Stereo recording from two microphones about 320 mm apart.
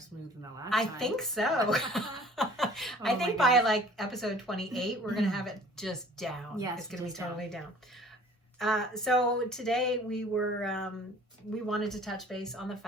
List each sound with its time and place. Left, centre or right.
0.7 s a woman's voice: centre